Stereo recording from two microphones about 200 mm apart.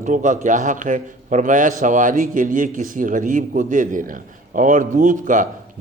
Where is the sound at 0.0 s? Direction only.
40° right (ahead or behind).